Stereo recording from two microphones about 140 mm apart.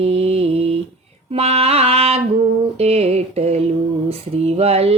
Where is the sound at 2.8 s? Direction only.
50° right (ahead or behind).